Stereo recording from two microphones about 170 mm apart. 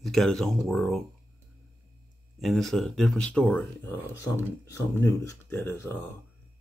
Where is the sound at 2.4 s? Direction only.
Centre (ahead or behind).